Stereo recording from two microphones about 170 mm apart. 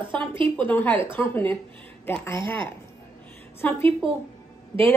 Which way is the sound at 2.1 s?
15° left (ahead or behind).